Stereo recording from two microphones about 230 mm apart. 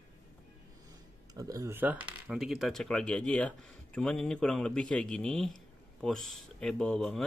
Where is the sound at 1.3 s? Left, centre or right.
Centre.